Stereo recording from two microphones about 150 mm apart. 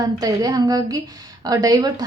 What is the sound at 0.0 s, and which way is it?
A woman's voice, 25° right (ahead or behind).